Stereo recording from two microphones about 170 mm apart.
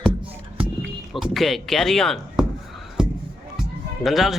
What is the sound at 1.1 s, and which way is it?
Speech, centre (ahead or behind).